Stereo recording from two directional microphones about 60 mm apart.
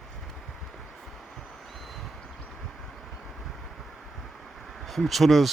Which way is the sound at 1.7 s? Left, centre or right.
Centre.